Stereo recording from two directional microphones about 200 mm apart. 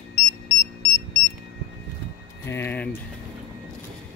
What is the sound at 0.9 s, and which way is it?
Beep, 60° left (ahead or behind).